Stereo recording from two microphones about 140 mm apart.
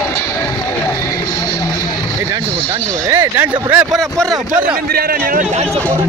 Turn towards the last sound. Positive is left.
turn(degrees=-90)